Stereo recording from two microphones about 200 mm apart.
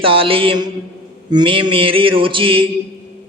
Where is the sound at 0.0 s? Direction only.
25° right (ahead or behind).